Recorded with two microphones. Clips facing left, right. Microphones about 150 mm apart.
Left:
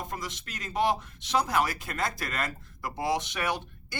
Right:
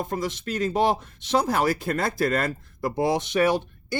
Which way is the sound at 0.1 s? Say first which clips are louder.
Right 10 dB; 30° right (ahead or behind).